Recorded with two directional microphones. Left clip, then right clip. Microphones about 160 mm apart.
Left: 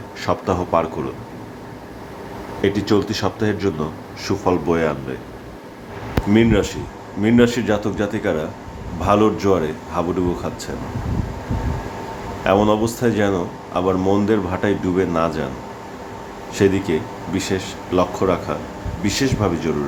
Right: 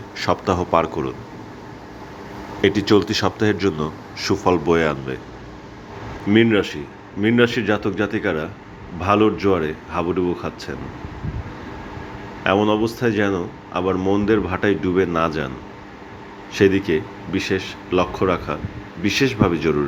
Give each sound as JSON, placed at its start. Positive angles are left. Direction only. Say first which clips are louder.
{"t": 0.2, "sound": "speech", "louder": "right 1 dB", "side_deg": -15}
{"t": 2.6, "sound": "speech", "louder": "right 2 dB", "side_deg": -20}
{"t": 6.3, "sound": "speech", "louder": "right 1 dB", "side_deg": -15}
{"t": 12.4, "sound": "speech", "louder": "left 1 dB", "side_deg": -10}
{"t": 16.6, "sound": "speech", "louder": "right 1 dB", "side_deg": -15}